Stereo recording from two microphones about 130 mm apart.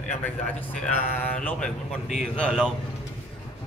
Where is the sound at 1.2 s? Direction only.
10° left (ahead or behind).